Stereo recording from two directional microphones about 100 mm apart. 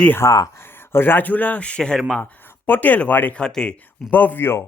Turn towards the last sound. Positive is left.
turn(degrees=25)  # may be behind; listen again after turning